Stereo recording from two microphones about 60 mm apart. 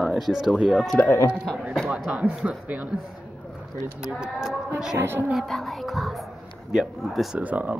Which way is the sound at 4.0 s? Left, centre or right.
Centre.